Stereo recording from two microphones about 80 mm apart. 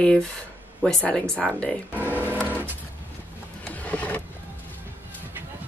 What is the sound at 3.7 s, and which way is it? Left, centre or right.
Vehicle, centre.